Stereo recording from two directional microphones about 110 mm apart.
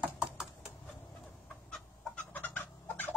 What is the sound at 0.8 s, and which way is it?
Chicken, 5° left (ahead or behind).